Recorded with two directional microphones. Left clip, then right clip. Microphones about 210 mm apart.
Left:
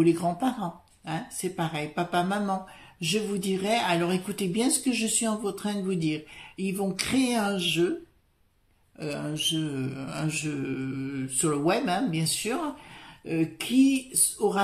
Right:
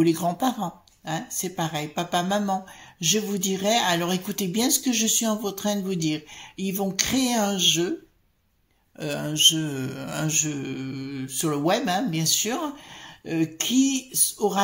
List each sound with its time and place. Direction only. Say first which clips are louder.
0.0 s speech: right 2 dB; 35° right (ahead or behind)
9.0 s speech: right 9 dB; 35° right (ahead or behind)